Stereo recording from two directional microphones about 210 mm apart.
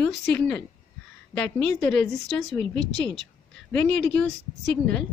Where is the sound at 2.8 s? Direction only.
60° left (ahead or behind).